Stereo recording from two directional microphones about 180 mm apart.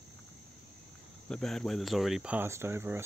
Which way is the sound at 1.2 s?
5° left (ahead or behind).